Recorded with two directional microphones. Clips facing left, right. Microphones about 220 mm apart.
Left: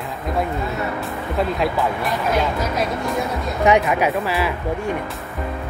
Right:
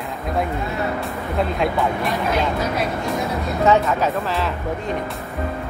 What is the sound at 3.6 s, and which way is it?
Speech, 15° left (ahead or behind).